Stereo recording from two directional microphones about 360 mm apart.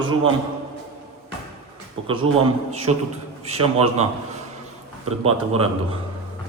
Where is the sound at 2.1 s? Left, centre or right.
Centre.